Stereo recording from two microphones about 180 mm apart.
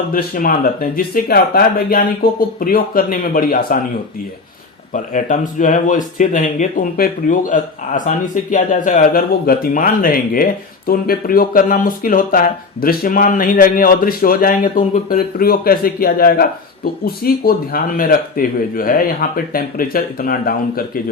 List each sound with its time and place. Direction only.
0.1 s speech: 50° left (ahead or behind)
5.1 s speech: 45° left (ahead or behind)